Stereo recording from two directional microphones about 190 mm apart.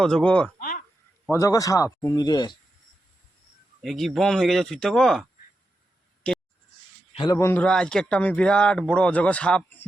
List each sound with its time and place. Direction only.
0.0 s speech: 5° left (ahead or behind)
1.3 s speech: 15° left (ahead or behind)
3.8 s speech: centre (ahead or behind)
7.1 s a sound: 25° left (ahead or behind)
7.3 s speech: 10° left (ahead or behind)